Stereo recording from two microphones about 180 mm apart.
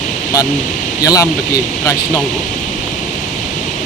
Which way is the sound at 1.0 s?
20° left (ahead or behind).